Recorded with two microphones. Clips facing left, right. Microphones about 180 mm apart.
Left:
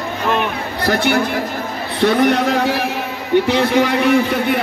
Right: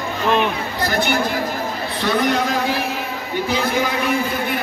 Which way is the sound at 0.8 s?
65° left (ahead or behind).